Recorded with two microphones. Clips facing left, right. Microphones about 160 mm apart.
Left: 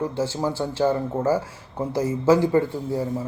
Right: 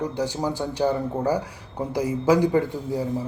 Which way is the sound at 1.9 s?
15° right (ahead or behind).